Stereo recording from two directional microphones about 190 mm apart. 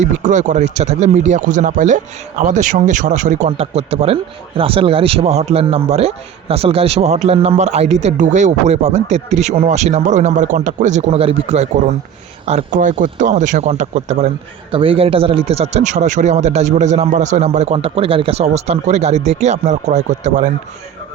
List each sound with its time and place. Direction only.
0.0 s speech: 40° right (ahead or behind)